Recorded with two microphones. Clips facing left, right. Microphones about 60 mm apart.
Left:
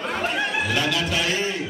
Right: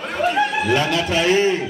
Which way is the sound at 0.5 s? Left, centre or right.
Right.